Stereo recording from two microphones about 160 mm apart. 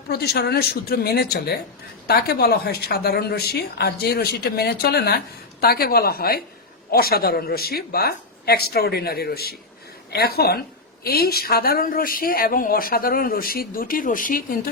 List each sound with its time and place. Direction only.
0.1 s a woman's voice: 85° left; by 14.6 s 60° left (ahead or behind)